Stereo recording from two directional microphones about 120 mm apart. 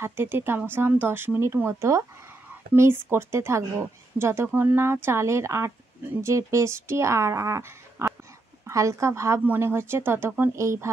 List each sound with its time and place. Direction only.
0.0 s speech: 20° right (ahead or behind)
8.0 s a sound: 20° right (ahead or behind)
8.6 s speech: 25° right (ahead or behind)